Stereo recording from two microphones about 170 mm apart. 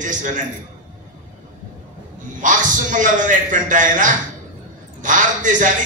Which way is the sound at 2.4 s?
50° right (ahead or behind).